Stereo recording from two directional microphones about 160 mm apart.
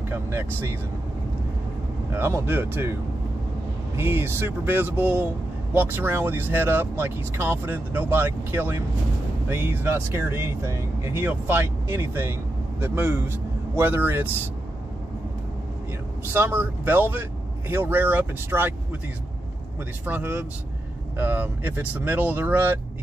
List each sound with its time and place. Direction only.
0.1 s speech: 15° right (ahead or behind)
2.1 s speech: 15° right (ahead or behind)
16.3 s speech: 15° right (ahead or behind)
20.1 s speech: 10° right (ahead or behind)